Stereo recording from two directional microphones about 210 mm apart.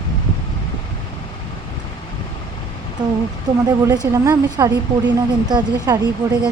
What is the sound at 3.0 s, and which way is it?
Speech, 20° right (ahead or behind).